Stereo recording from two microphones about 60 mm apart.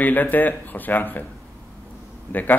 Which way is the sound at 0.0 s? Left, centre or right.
Left.